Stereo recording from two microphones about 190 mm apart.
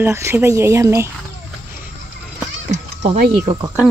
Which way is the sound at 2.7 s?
40° right (ahead or behind).